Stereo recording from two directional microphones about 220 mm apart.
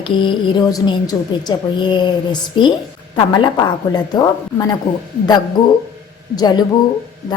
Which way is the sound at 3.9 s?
20° left (ahead or behind).